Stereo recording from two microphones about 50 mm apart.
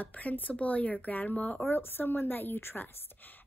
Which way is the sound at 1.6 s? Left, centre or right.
Left.